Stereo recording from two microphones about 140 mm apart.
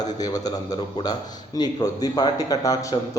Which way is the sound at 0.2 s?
25° left (ahead or behind).